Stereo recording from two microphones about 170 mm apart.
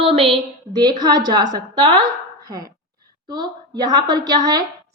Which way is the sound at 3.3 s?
25° right (ahead or behind).